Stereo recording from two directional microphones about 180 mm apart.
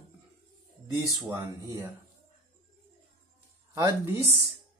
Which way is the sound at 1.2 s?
10° right (ahead or behind).